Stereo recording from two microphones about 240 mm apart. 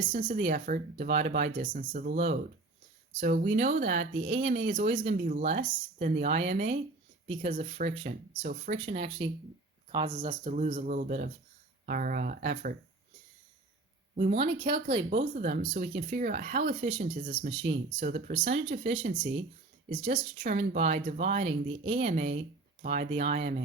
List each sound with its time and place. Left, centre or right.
0.1 s speech: right
3.3 s speech: right
14.2 s speech: right